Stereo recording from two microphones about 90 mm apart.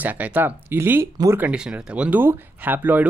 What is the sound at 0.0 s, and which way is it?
Speech, 20° right (ahead or behind).